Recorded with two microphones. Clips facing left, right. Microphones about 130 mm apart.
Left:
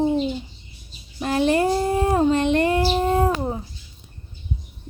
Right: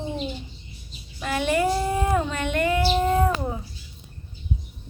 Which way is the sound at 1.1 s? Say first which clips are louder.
Left 4 dB; 35° left (ahead or behind).